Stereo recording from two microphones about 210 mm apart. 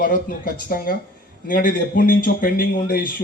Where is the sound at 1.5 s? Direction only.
40° left (ahead or behind).